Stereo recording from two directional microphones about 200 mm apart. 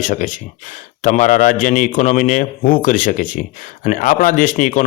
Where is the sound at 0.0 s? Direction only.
40° left (ahead or behind).